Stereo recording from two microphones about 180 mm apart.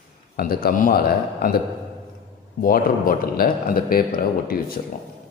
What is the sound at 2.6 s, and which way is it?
Speech, 50° left (ahead or behind).